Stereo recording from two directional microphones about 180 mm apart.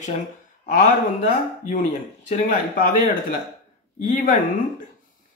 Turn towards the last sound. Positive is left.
turn(degrees=45)  # may be behind; listen again after turning